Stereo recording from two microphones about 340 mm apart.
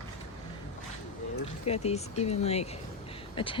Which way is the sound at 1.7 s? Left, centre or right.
Centre.